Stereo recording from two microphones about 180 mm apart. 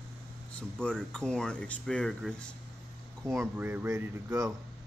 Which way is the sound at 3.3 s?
10° right (ahead or behind).